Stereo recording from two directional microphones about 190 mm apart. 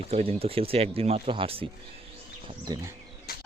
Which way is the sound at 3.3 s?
55° left (ahead or behind).